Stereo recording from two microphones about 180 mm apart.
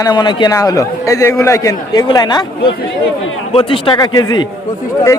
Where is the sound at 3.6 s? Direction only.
30° left (ahead or behind).